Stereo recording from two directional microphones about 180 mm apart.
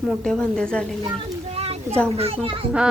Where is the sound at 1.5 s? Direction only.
35° right (ahead or behind).